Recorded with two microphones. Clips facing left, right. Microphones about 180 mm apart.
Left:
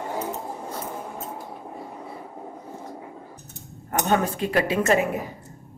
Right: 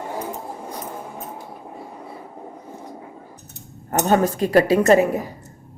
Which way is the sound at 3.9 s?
40° right (ahead or behind).